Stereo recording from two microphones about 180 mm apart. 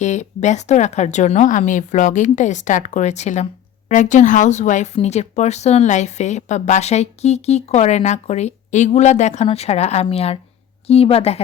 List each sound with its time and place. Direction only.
0.0 s a woman's voice: 40° left (ahead or behind)